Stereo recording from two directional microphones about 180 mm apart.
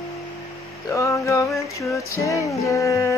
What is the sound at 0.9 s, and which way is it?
Music, 15° left (ahead or behind).